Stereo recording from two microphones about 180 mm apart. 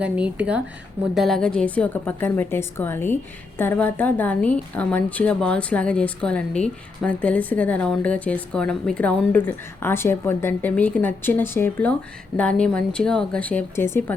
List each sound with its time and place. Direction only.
0.0 s a woman's voice: 5° right (ahead or behind); by 14.0 s 15° left (ahead or behind)